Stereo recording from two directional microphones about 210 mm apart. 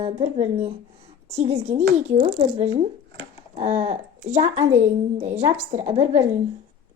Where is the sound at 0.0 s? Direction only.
30° right (ahead or behind).